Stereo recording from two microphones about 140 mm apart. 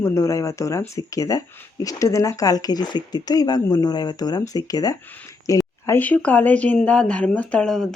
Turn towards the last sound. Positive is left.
turn(degrees=5)  # may be behind; listen again after turning